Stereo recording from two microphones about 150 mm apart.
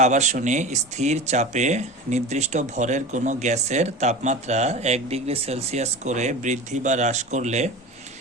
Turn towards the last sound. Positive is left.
turn(degrees=-50)  # may be behind; listen again after turning